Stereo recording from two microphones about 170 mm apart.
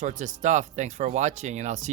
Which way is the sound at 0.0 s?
45° right (ahead or behind).